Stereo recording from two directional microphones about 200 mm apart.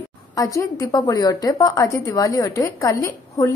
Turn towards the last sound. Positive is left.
turn(degrees=15)  # may be behind; listen again after turning